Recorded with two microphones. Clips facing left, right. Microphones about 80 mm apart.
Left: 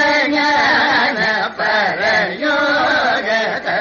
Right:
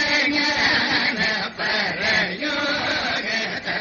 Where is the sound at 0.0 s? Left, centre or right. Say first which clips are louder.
Left 8 dB; left.